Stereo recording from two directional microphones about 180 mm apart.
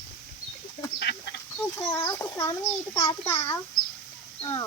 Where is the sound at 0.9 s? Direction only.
65° left (ahead or behind).